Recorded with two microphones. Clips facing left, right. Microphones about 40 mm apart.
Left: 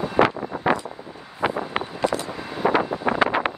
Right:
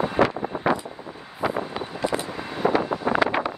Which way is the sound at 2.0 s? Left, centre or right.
Centre.